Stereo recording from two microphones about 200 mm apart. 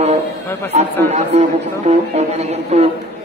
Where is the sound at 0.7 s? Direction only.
35° right (ahead or behind).